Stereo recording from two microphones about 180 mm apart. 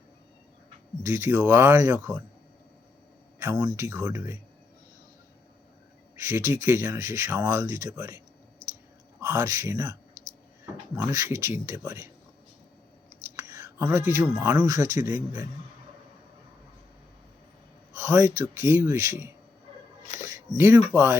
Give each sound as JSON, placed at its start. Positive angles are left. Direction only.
{"t": 1.0, "sound": "speech", "side_deg": -15}
{"t": 3.5, "sound": "a man's voice", "side_deg": -25}
{"t": 6.1, "sound": "speech", "side_deg": -15}
{"t": 8.6, "sound": "clicking", "side_deg": -40}
{"t": 9.2, "sound": "speech", "side_deg": -15}
{"t": 11.0, "sound": "speech", "side_deg": -15}
{"t": 13.3, "sound": "a man's voice", "side_deg": -15}
{"t": 17.9, "sound": "speech", "side_deg": -15}
{"t": 20.3, "sound": "speech", "side_deg": -15}